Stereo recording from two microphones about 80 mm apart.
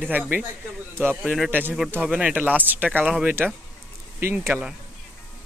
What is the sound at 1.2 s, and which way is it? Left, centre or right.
Speech, centre.